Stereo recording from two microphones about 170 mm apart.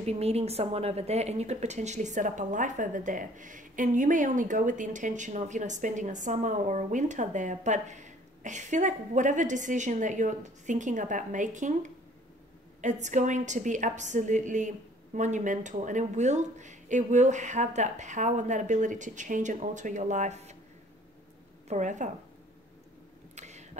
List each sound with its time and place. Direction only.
0.0 s a woman's voice: 40° right (ahead or behind)
21.6 s a woman's voice: 45° right (ahead or behind)
23.3 s a sound: 45° right (ahead or behind)